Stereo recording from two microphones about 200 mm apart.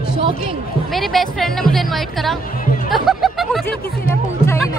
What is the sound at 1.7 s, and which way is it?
Music, centre (ahead or behind).